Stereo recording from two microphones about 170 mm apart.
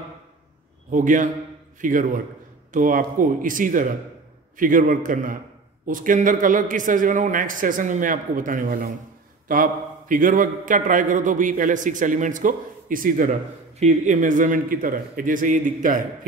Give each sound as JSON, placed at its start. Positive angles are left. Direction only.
{"t": 0.8, "sound": "a man's voice", "side_deg": -50}
{"t": 13.7, "sound": "a man's voice", "side_deg": -40}